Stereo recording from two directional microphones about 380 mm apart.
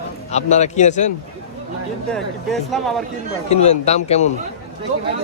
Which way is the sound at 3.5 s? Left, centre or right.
Centre.